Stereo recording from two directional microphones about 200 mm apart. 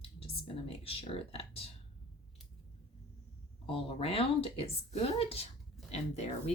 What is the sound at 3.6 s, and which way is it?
Speech, 30° left (ahead or behind).